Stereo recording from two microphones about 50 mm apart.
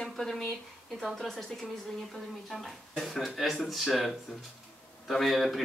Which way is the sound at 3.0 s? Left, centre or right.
Centre.